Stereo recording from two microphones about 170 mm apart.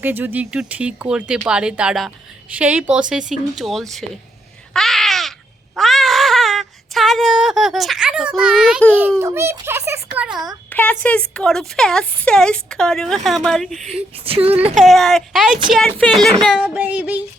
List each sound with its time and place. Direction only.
0.0 s speech: 10° right (ahead or behind)
4.7 s babbling: centre (ahead or behind)
5.7 s a sound: centre (ahead or behind)
9.0 s a child's voice: 15° right (ahead or behind)
10.2 s speech: 25° right (ahead or behind)
10.7 s speech: 10° left (ahead or behind)
14.3 s speech: 35° right (ahead or behind)
14.8 s a child's voice: centre (ahead or behind)